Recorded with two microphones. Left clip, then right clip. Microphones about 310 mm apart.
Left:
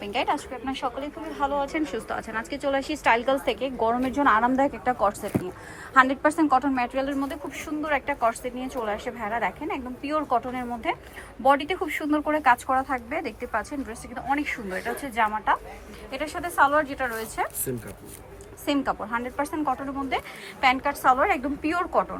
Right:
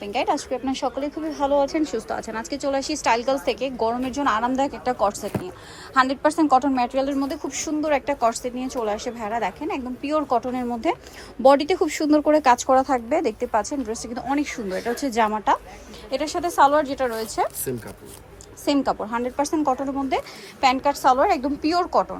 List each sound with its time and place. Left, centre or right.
0.0 s speech: centre